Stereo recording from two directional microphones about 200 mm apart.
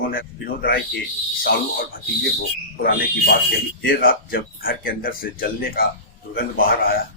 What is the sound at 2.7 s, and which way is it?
Speech, 50° left (ahead or behind).